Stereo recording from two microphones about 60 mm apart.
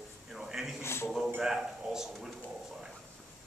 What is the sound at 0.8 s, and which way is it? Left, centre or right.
Speech, left.